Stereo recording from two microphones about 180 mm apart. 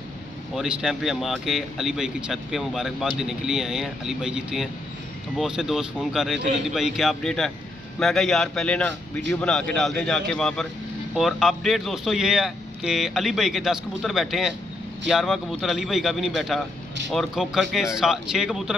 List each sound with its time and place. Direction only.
0.6 s speech: 5° right (ahead or behind)